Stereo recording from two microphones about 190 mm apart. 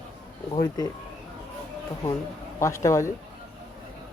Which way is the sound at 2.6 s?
15° left (ahead or behind).